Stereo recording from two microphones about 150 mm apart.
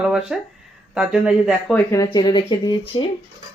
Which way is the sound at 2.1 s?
30° left (ahead or behind).